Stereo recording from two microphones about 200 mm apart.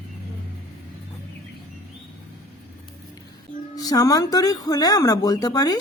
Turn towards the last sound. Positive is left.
turn(degrees=20)  # may be behind; listen again after turning